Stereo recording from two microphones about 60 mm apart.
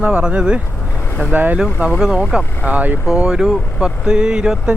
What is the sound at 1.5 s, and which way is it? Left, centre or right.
Speech, centre.